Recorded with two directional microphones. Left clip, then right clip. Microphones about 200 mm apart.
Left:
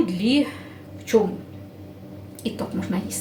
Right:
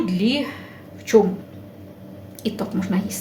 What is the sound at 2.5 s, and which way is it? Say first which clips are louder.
Speech: right 2 dB; 35° right (ahead or behind).